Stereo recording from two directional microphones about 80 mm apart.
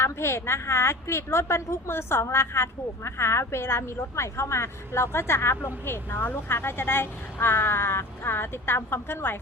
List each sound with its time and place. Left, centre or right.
0.0 s a woman's voice: left